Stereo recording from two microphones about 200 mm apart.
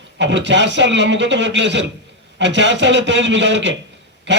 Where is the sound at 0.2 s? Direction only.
65° right (ahead or behind).